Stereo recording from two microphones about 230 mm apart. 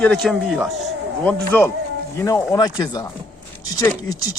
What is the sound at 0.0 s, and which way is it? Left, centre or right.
A man's voice, centre.